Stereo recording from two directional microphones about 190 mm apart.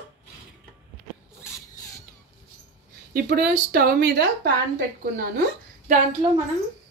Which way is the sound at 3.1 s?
55° right (ahead or behind).